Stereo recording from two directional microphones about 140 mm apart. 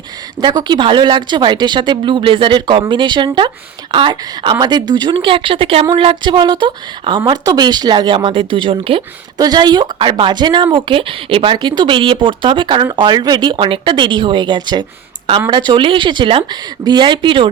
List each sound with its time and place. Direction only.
0.4 s speech: 30° right (ahead or behind)
9.4 s speech: 30° right (ahead or behind)